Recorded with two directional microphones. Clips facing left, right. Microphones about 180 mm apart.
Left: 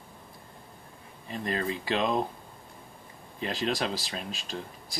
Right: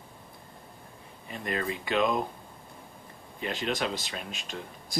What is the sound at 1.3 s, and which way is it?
Speech, 35° left (ahead or behind).